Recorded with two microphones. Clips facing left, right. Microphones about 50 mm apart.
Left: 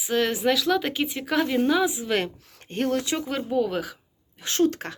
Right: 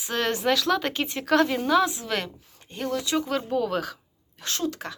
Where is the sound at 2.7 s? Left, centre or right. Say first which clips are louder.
Left 4 dB; left.